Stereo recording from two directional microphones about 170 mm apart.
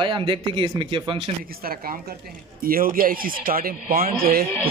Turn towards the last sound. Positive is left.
turn(degrees=-60)  # may be behind; listen again after turning